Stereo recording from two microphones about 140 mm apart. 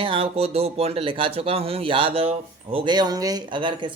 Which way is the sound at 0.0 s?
40° right (ahead or behind).